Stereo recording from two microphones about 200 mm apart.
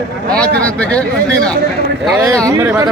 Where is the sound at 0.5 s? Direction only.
5° left (ahead or behind).